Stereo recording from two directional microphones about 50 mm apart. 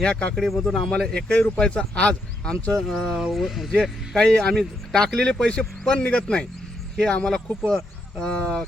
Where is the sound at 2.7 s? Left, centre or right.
Centre.